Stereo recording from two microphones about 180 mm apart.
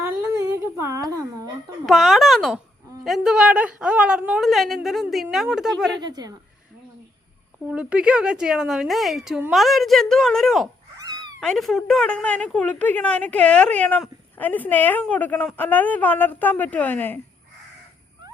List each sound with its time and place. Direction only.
0.0 s a sound: 10° right (ahead or behind)
1.9 s a woman's voice: centre (ahead or behind)
6.0 s a woman's voice: 20° right (ahead or behind)
7.7 s a woman's voice: 5° right (ahead or behind); by 17.2 s 10° left (ahead or behind)